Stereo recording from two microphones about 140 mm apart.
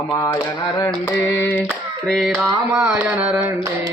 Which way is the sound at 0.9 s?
10° left (ahead or behind).